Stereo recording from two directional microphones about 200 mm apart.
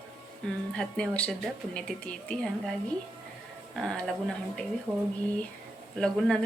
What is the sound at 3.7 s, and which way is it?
Speech, 5° left (ahead or behind).